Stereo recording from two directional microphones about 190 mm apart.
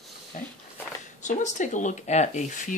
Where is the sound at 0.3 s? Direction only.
40° left (ahead or behind).